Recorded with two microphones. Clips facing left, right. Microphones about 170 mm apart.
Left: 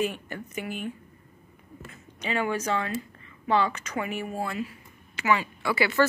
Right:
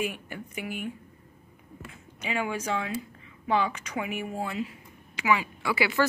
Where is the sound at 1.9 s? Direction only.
10° right (ahead or behind).